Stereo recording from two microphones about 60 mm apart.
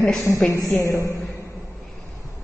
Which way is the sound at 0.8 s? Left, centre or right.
Left.